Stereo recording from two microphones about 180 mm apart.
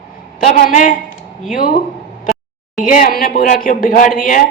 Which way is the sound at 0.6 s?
45° left (ahead or behind).